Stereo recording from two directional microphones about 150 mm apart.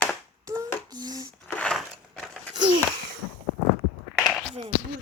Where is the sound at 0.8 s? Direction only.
25° right (ahead or behind).